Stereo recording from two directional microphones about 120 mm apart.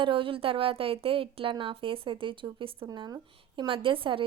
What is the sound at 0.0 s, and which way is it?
A woman's voice, 45° right (ahead or behind).